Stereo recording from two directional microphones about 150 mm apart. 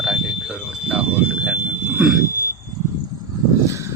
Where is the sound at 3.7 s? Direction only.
20° right (ahead or behind).